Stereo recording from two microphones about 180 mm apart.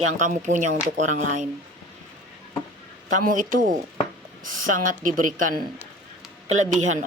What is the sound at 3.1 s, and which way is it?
A man's voice, 45° right (ahead or behind).